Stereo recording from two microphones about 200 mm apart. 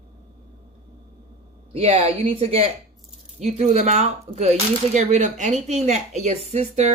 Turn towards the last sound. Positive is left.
turn(degrees=-35)  # may be behind; listen again after turning